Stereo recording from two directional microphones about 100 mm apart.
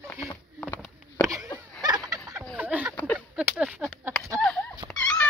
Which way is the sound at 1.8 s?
40° right (ahead or behind).